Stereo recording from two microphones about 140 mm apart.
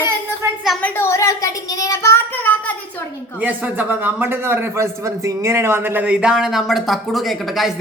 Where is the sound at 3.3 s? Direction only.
10° right (ahead or behind).